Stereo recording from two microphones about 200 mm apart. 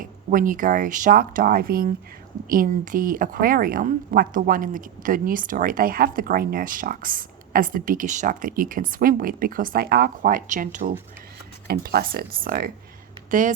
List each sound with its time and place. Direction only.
0.0 s a woman's voice: 45° right (ahead or behind)